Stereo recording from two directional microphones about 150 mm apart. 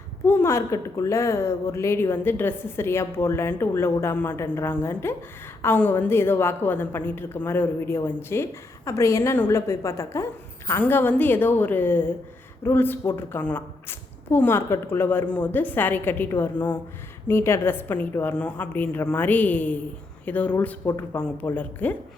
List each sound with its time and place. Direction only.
0.3 s a woman's voice: 15° left (ahead or behind)